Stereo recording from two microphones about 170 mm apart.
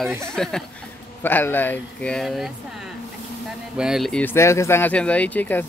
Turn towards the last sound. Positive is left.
turn(degrees=10)  # may be behind; listen again after turning